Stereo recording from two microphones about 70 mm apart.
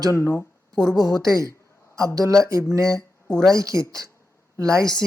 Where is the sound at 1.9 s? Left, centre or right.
Right.